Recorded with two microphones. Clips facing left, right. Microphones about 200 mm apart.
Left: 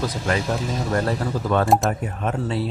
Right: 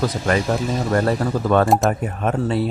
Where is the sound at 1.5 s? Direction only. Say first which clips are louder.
Right 3 dB; 55° right (ahead or behind).